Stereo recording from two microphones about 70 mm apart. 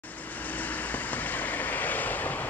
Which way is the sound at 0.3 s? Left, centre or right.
Left.